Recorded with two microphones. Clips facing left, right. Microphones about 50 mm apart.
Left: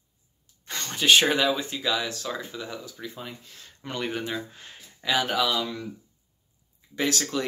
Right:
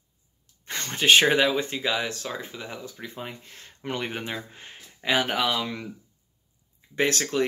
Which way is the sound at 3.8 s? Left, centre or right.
Right.